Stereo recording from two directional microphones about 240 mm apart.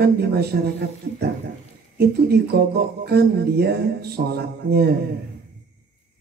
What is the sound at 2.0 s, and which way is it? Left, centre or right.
Speech, right.